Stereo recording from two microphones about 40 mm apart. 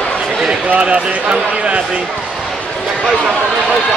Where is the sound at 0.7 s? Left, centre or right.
Right.